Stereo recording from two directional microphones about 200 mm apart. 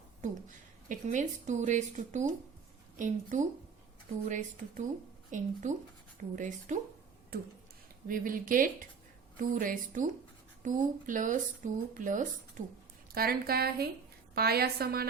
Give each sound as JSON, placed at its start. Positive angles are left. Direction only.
{"t": 0.2, "sound": "speech", "side_deg": -40}
{"t": 5.3, "sound": "a woman's voice", "side_deg": -40}